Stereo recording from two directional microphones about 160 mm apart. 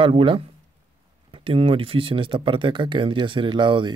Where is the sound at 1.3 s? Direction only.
35° right (ahead or behind).